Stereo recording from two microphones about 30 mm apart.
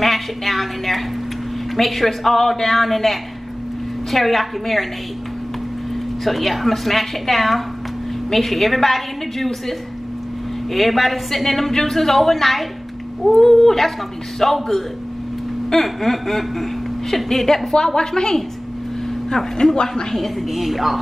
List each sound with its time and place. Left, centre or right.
0.0 s a woman's voice: centre
6.2 s a woman's voice: centre
17.9 s speech: left
20.5 s a woman's voice: centre